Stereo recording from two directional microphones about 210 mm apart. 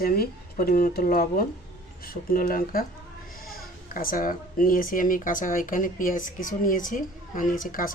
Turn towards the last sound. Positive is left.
turn(degrees=40)  # may be behind; listen again after turning